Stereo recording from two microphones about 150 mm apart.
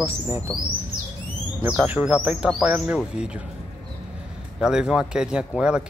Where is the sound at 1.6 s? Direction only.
10° right (ahead or behind).